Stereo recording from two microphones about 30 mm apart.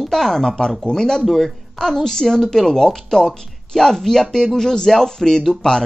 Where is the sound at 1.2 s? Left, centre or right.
Centre.